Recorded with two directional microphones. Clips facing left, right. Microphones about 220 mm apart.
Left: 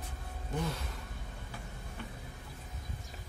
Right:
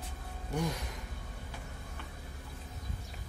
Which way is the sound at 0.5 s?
15° right (ahead or behind).